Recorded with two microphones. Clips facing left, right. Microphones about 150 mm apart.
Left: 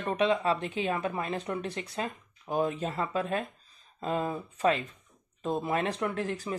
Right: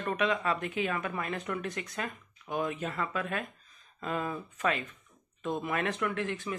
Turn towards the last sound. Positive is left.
turn(degrees=35)  # may be behind; listen again after turning